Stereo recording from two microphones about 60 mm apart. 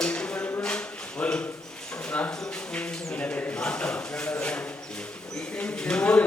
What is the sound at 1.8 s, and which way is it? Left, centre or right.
Speech, centre.